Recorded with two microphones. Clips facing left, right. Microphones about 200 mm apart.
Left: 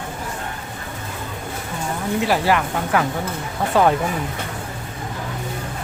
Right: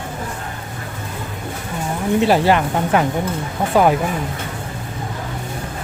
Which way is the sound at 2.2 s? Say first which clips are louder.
Right 4 dB; 25° right (ahead or behind).